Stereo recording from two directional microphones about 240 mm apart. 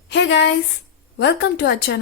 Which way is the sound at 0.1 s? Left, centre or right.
Left.